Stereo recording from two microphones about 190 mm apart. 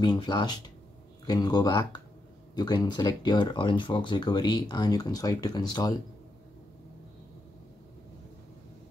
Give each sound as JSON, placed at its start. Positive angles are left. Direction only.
{"t": 0.0, "sound": "speech", "side_deg": 25}